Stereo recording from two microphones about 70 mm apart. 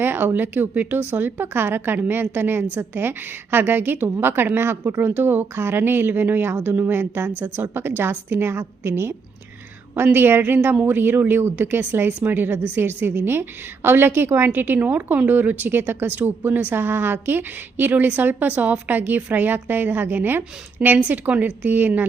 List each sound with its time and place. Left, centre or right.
0.0 s a woman's voice: right